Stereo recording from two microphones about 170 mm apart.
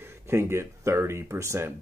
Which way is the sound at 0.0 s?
15° right (ahead or behind).